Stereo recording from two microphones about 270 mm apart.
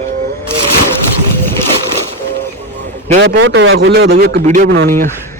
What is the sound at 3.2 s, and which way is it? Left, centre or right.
A man's voice, right.